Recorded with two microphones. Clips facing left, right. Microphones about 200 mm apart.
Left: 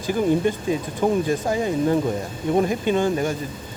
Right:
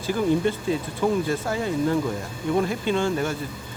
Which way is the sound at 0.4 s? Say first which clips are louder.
Left 2 dB; 15° left (ahead or behind).